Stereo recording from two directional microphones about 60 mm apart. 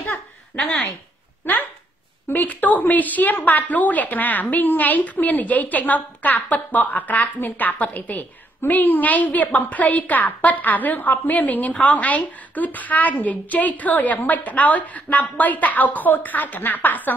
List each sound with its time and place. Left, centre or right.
1.4 s a woman's voice: left